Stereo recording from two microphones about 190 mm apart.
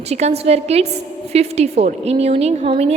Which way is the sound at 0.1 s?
35° right (ahead or behind).